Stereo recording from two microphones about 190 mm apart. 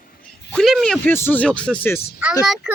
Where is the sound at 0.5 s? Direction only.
Centre (ahead or behind).